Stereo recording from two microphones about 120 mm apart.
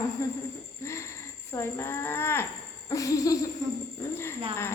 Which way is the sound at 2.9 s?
30° left (ahead or behind).